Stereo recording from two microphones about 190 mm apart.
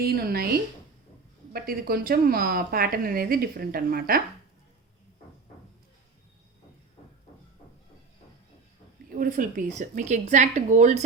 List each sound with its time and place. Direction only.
0.0 s a woman's voice: 55° right (ahead or behind)
9.1 s speech: 45° right (ahead or behind)